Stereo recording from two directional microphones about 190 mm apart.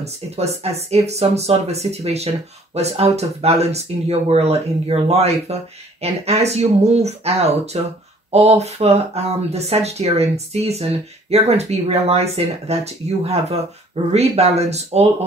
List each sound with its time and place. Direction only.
0.0 s speech: 35° right (ahead or behind)